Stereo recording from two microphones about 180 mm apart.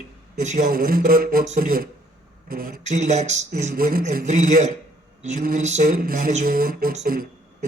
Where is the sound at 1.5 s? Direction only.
50° right (ahead or behind).